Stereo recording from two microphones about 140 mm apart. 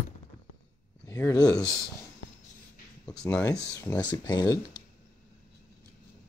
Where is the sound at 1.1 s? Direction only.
20° left (ahead or behind).